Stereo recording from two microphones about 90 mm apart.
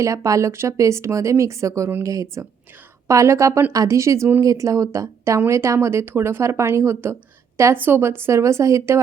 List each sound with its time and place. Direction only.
0.0 s speech: 35° right (ahead or behind)